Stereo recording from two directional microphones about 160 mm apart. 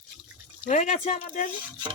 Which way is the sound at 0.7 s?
50° left (ahead or behind).